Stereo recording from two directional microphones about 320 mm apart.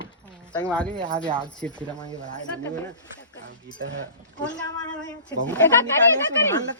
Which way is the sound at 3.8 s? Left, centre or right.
Right.